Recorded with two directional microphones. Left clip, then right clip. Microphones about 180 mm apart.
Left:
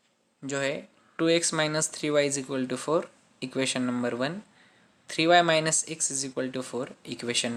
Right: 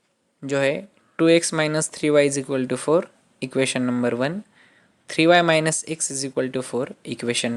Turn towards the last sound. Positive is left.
turn(degrees=-40)  # may be behind; listen again after turning